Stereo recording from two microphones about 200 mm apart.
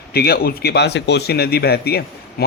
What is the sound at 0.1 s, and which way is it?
A man's voice, 50° left (ahead or behind).